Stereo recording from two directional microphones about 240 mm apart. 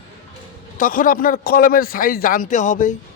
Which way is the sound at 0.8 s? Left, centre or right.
Left.